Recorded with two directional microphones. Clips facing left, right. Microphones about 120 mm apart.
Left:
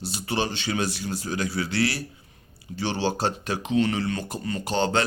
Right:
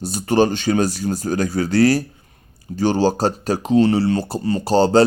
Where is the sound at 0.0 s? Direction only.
45° right (ahead or behind).